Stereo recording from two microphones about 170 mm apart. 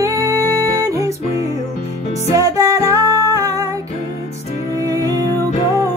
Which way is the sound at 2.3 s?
20° right (ahead or behind).